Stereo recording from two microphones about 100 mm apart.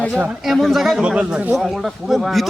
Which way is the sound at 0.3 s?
Centre (ahead or behind).